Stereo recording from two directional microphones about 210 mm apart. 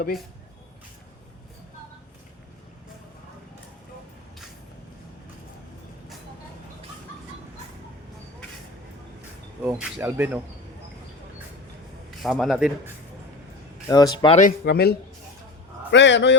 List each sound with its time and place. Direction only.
9.6 s speech: 10° right (ahead or behind)
12.2 s a man's voice: centre (ahead or behind)
13.8 s speech: 20° left (ahead or behind)
14.6 s a man's voice: 50° left (ahead or behind)